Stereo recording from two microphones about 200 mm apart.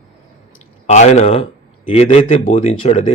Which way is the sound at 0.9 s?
35° left (ahead or behind).